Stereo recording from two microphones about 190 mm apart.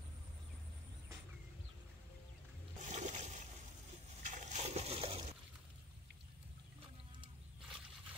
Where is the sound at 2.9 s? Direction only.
40° right (ahead or behind).